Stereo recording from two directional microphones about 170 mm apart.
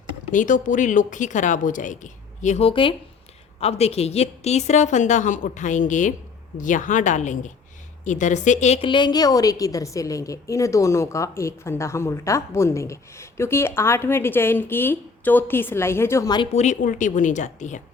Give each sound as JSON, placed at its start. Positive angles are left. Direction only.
{"t": 0.3, "sound": "a woman's voice", "side_deg": 50}
{"t": 16.5, "sound": "speech", "side_deg": 45}